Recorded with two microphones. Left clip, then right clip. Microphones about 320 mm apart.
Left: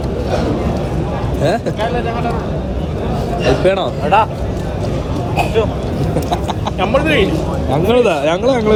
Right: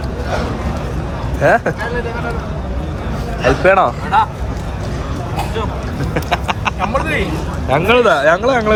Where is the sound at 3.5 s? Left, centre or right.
Centre.